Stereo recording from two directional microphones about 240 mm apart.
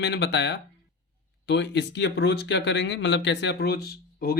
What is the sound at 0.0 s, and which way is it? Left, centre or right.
Speech, left.